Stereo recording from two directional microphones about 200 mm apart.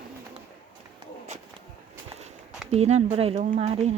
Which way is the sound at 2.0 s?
35° right (ahead or behind).